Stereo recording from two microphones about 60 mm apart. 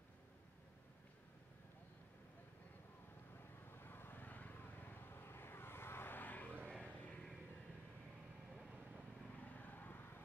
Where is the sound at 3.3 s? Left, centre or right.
Left.